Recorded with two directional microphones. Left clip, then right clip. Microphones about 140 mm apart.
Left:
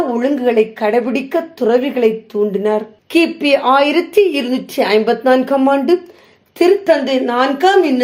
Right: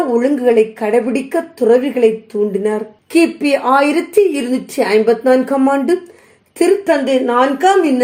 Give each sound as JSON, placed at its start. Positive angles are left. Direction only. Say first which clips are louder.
{"t": 0.1, "sound": "a woman's voice", "louder": "right 2 dB", "side_deg": 15}